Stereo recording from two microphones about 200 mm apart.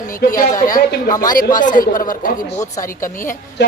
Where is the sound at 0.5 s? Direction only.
15° left (ahead or behind).